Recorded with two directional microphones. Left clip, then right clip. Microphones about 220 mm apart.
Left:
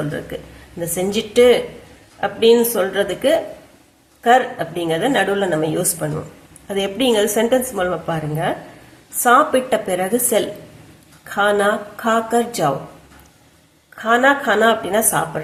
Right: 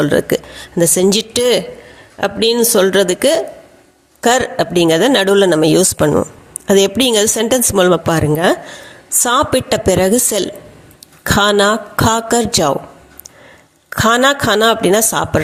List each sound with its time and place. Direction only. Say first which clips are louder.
0.0 s a woman's voice: right 12 dB; 45° right (ahead or behind)
13.9 s a woman's voice: right 3 dB; 45° right (ahead or behind)